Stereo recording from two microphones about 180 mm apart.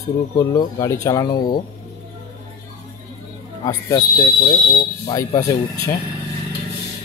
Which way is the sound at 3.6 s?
20° left (ahead or behind).